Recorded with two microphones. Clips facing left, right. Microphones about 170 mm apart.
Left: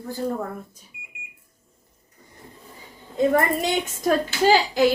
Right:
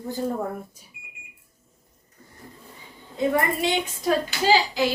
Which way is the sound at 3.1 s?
45° left (ahead or behind).